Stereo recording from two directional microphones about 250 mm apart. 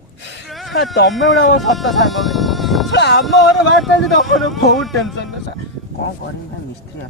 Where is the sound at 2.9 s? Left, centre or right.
Left.